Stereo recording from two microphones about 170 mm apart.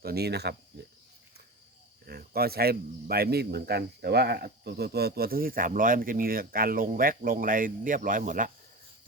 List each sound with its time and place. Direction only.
0.0 s cricket: 70° right (ahead or behind)
2.0 s speech: 65° right (ahead or behind); by 8.5 s 50° right (ahead or behind)